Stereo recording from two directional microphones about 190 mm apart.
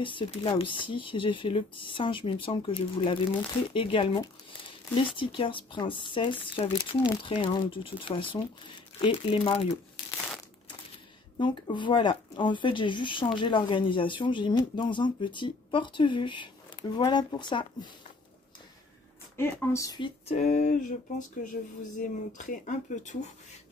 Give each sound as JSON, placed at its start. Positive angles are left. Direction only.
{"t": 0.0, "sound": "speech", "side_deg": 25}
{"t": 11.3, "sound": "speech", "side_deg": 25}
{"t": 19.3, "sound": "speech", "side_deg": 10}
{"t": 20.2, "sound": "speech", "side_deg": 35}